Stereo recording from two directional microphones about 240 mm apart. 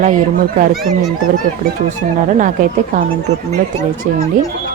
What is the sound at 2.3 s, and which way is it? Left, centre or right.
Speech, right.